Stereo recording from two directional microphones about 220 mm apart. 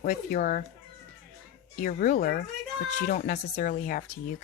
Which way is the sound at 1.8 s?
35° left (ahead or behind).